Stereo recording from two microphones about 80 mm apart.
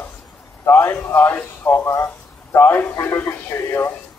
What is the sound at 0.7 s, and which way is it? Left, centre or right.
A man's voice, left.